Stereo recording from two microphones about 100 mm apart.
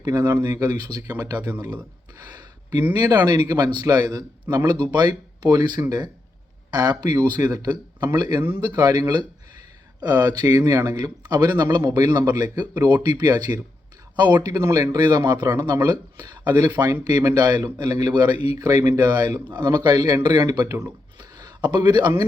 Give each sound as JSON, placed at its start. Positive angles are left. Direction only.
{"t": 0.1, "sound": "speech", "side_deg": -30}
{"t": 2.3, "sound": "a sound", "side_deg": -40}
{"t": 3.1, "sound": "a man's voice", "side_deg": -40}
{"t": 10.4, "sound": "speech", "side_deg": -25}
{"t": 10.8, "sound": "a man's voice", "side_deg": -45}
{"t": 14.3, "sound": "speech", "side_deg": -35}
{"t": 15.0, "sound": "a man's voice", "side_deg": -45}
{"t": 15.4, "sound": "speech", "side_deg": -35}
{"t": 16.3, "sound": "speech", "side_deg": -20}
{"t": 16.8, "sound": "a man's voice", "side_deg": -35}
{"t": 20.7, "sound": "speech", "side_deg": -25}
{"t": 21.2, "sound": "a sound", "side_deg": -45}